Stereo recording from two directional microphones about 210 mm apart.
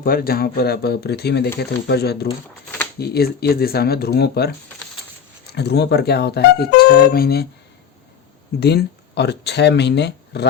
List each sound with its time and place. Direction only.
0.0 s speech: 45° left (ahead or behind)
5.5 s speech: 50° left (ahead or behind)
8.6 s speech: 50° left (ahead or behind)